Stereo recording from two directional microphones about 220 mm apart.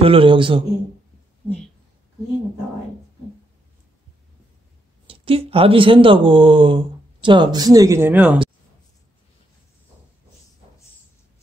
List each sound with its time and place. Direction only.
0.0 s speech: 25° right (ahead or behind)
5.0 s speech: 25° right (ahead or behind); by 8.4 s 5° right (ahead or behind)